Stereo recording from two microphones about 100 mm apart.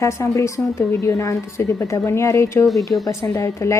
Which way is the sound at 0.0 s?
30° left (ahead or behind).